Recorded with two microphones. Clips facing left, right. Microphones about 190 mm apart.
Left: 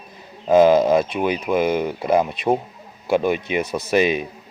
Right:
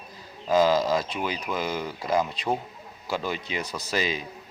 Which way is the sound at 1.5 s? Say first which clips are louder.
Left 12 dB; 45° left (ahead or behind).